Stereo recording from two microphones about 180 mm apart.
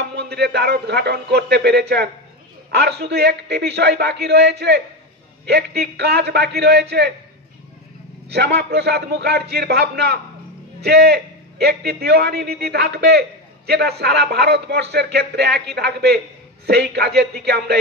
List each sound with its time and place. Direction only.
0.0 s a man's voice: 70° right (ahead or behind)
8.3 s a man's voice: 65° right (ahead or behind)